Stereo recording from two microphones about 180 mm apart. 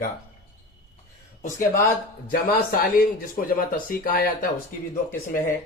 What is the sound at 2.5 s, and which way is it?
Speech, 50° left (ahead or behind).